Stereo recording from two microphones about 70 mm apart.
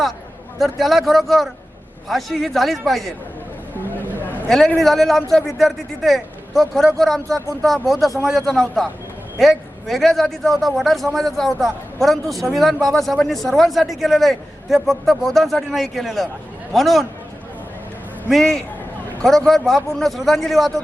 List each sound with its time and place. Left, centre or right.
0.6 s a man's voice: centre
3.9 s a sound: left
4.4 s a man's voice: centre
18.3 s a man's voice: centre